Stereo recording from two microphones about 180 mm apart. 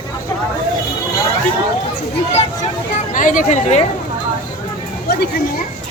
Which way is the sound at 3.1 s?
45° left (ahead or behind).